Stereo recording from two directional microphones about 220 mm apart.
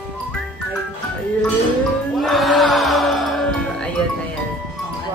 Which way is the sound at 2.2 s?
Centre (ahead or behind).